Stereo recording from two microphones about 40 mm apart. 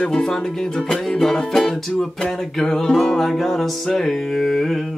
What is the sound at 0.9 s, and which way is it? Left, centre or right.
Music, centre.